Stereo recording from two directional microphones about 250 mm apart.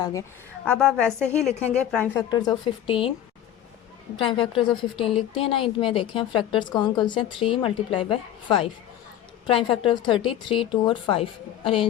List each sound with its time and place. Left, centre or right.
0.0 s a woman's voice: centre
2.3 s a woman's voice: centre
4.3 s a woman's voice: left